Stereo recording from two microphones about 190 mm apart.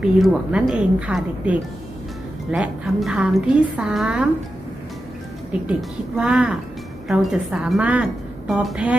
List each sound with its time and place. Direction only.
0.0 s a woman's voice: centre (ahead or behind)
6.1 s a woman's voice: 5° right (ahead or behind)